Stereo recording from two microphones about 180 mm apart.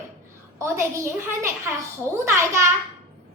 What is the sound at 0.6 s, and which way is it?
Speech, 15° right (ahead or behind).